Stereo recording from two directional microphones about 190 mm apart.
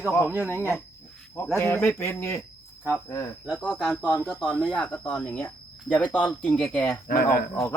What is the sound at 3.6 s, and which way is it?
Speech, centre (ahead or behind).